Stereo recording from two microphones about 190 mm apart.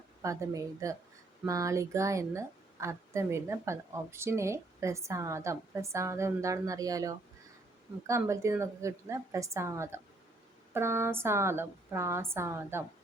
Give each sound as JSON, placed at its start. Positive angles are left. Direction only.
{"t": 0.2, "sound": "a woman's voice", "side_deg": -15}